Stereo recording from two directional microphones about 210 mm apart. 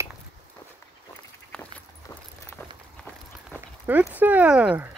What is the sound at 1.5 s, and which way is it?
Walk, 10° left (ahead or behind).